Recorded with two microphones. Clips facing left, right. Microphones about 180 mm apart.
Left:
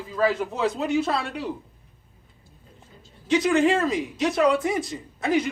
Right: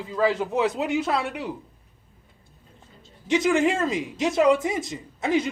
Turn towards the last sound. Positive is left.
turn(degrees=-25)  # may be behind; listen again after turning